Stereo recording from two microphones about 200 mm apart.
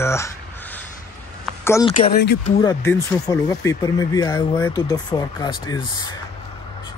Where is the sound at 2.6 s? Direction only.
15° left (ahead or behind).